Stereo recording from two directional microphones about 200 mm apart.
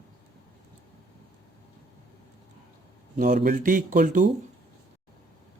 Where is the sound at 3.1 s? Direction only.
40° right (ahead or behind).